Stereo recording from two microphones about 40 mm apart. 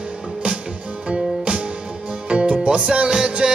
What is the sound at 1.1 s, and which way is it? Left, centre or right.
Music, right.